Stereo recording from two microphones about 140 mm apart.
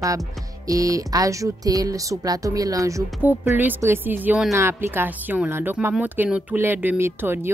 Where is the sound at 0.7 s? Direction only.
25° right (ahead or behind).